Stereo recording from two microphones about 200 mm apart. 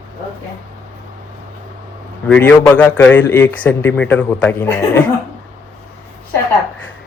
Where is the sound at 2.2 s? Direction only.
5° left (ahead or behind).